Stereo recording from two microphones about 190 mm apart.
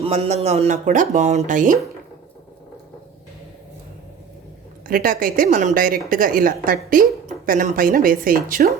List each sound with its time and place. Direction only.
0.0 s speech: 35° right (ahead or behind)
4.9 s a woman's voice: 50° right (ahead or behind)